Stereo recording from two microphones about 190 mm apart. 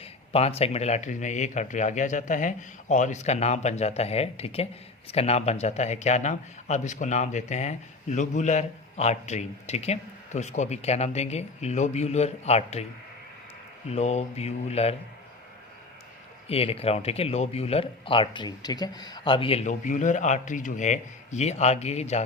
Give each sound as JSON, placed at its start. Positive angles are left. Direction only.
{"t": 0.0, "sound": "a man's voice", "side_deg": 30}
{"t": 13.9, "sound": "a man's voice", "side_deg": 35}
{"t": 16.5, "sound": "a man's voice", "side_deg": 30}